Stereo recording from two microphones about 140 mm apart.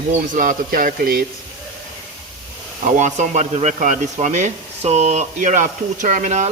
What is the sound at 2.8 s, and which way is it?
Speech, 55° right (ahead or behind).